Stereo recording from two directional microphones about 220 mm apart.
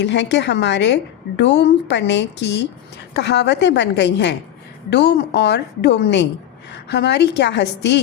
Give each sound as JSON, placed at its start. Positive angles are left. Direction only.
{"t": 0.0, "sound": "a woman's voice", "side_deg": 55}